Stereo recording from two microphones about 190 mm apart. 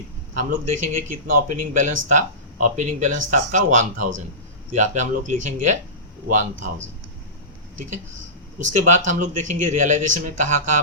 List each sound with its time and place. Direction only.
0.3 s speech: 40° right (ahead or behind)
8.6 s speech: 40° right (ahead or behind)